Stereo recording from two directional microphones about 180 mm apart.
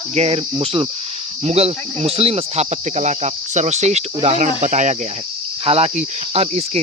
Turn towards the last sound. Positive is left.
turn(degrees=-35)  # may be behind; listen again after turning